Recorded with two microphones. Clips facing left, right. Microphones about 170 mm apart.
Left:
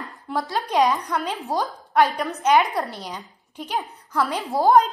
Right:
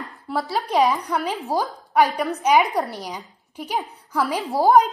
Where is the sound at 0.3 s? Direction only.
5° right (ahead or behind).